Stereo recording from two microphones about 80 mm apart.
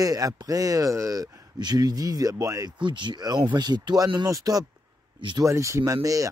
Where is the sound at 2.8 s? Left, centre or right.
Right.